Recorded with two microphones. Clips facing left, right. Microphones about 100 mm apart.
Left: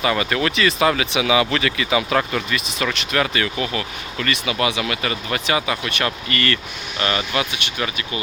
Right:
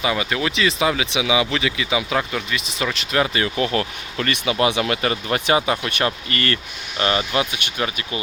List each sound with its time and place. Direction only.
0.0 s speech: 10° right (ahead or behind)
3.1 s speech: 25° right (ahead or behind)
3.6 s speech: 40° right (ahead or behind)
4.4 s speech: 30° right (ahead or behind)